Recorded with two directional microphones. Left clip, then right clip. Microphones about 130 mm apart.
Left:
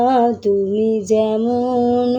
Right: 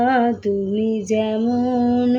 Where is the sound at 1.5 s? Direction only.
50° left (ahead or behind).